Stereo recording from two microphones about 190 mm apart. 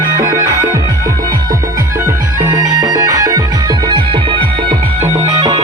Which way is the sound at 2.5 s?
20° right (ahead or behind).